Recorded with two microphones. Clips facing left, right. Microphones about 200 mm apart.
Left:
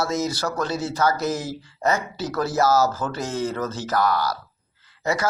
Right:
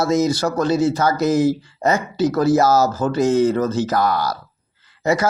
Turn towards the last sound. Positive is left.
turn(degrees=-20)  # may be behind; listen again after turning